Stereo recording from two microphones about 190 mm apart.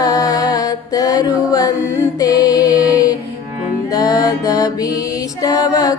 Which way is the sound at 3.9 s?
20° left (ahead or behind).